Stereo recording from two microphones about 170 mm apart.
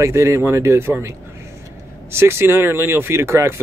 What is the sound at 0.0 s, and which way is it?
Speech, 15° right (ahead or behind).